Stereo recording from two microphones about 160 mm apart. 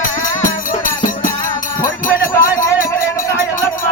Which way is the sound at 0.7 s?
55° left (ahead or behind).